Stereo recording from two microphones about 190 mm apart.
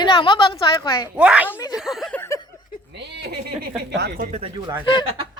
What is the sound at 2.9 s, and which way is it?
Speech, 65° right (ahead or behind).